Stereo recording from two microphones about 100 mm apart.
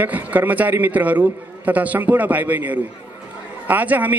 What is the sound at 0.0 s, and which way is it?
A man's voice, 15° right (ahead or behind).